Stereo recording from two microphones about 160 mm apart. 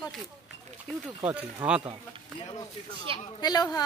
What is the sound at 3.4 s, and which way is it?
Speech, 25° left (ahead or behind).